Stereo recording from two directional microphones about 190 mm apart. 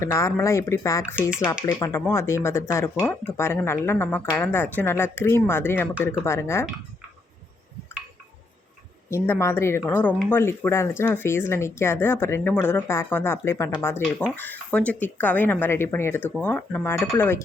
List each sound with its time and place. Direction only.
0.0 s speech: 15° left (ahead or behind)
9.0 s speech: 10° left (ahead or behind)